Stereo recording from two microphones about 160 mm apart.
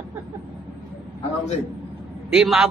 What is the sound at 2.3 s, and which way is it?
Speech, 5° right (ahead or behind).